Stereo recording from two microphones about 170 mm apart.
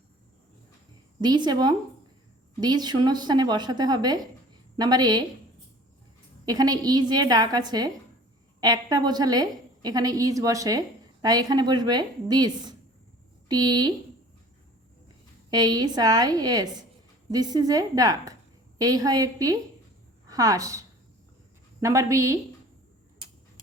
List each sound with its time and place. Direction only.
1.2 s a woman's voice: 25° right (ahead or behind)
6.4 s a woman's voice: 25° right (ahead or behind)
15.4 s a woman's voice: 25° right (ahead or behind)